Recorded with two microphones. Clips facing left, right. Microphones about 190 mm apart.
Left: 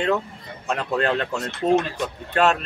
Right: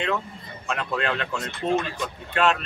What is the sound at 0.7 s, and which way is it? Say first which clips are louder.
A man's voice: left 4 dB; 40° left (ahead or behind).